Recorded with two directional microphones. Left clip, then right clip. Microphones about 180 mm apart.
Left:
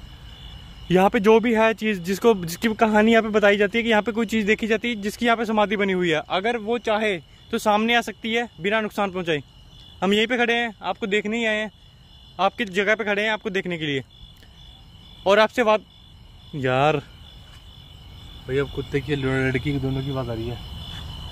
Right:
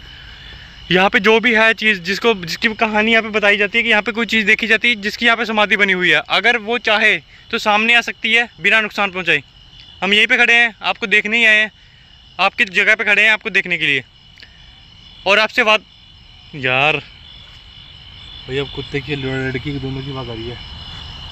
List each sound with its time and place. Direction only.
0.8 s speech: 10° left (ahead or behind); by 4.0 s 30° left (ahead or behind)
4.0 s speech: 10° left (ahead or behind)
9.9 s speech: 25° left (ahead or behind)
15.2 s speech: 20° left (ahead or behind)
16.5 s speech: 35° left (ahead or behind)
19.0 s speech: 20° right (ahead or behind); by 20.3 s 5° left (ahead or behind)